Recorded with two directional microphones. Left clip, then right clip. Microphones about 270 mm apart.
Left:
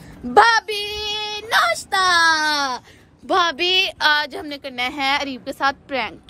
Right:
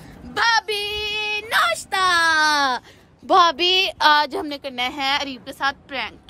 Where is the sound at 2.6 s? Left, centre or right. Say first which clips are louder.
Right 3 dB; right.